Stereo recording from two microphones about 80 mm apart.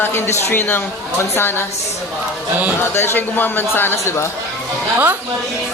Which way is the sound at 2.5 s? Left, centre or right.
Right.